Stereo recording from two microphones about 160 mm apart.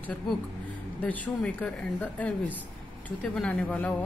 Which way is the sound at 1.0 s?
10° left (ahead or behind).